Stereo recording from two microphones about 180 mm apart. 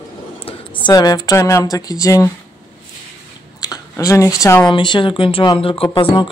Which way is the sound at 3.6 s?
20° left (ahead or behind).